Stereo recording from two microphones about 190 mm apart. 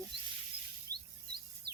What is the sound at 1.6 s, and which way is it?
Bird vocalization, 55° right (ahead or behind).